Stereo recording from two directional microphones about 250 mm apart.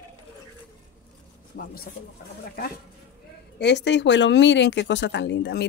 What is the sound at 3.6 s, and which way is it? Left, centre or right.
Speech, left.